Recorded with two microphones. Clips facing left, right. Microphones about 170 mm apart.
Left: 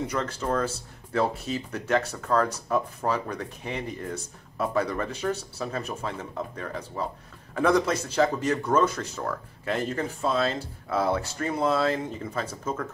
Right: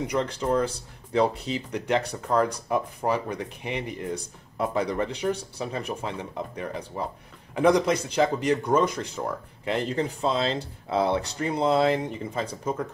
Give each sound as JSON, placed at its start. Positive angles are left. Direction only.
{"t": 0.0, "sound": "speech", "side_deg": -15}